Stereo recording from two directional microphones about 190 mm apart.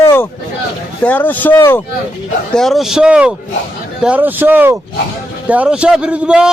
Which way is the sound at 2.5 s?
Centre (ahead or behind).